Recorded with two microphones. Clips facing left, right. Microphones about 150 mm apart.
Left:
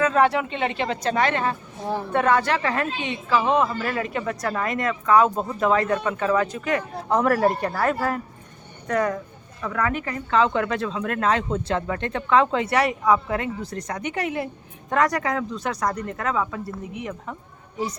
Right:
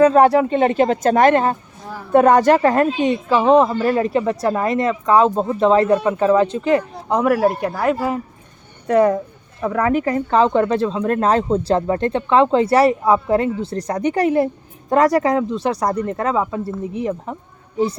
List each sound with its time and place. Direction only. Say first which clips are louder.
0.0 s a woman's voice: right 8 dB; 40° right (ahead or behind)
7.1 s speech: right 4 dB; 10° right (ahead or behind)
8.9 s a woman's voice: right 9 dB; 30° right (ahead or behind)